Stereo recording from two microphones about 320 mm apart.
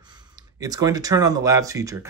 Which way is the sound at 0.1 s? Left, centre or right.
Centre.